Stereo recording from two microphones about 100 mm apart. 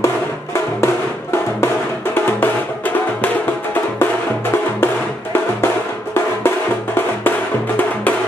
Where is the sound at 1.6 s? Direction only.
20° left (ahead or behind).